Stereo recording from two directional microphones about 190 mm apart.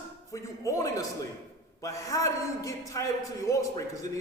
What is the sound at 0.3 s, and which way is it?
A man's voice, 15° left (ahead or behind).